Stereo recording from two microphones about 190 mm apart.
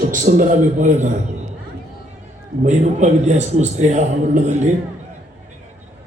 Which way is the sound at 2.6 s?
40° right (ahead or behind).